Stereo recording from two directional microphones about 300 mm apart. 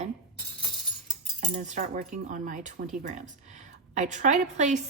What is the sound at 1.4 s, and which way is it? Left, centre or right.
A woman's voice, right.